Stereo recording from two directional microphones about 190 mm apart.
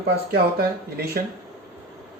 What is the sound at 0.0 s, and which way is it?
Speech, 55° right (ahead or behind).